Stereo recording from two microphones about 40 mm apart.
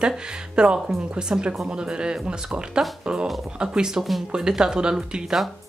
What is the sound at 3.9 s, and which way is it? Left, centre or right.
Speech, centre.